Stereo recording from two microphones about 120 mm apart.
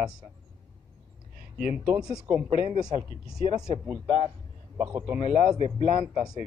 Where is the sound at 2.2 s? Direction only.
15° right (ahead or behind).